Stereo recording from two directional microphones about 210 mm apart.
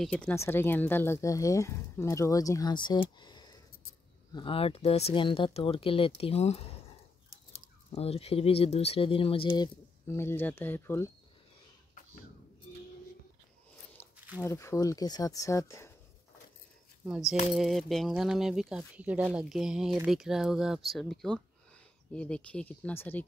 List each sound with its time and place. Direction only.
0.0 s speech: 5° left (ahead or behind); by 9.7 s 25° left (ahead or behind)
10.0 s speech: 10° left (ahead or behind)
14.0 s biting: 10° left (ahead or behind)
14.4 s speech: 15° left (ahead or behind)
17.0 s speech: 5° right (ahead or behind)